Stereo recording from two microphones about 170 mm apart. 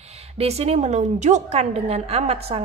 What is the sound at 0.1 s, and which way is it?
A woman's voice, 40° right (ahead or behind).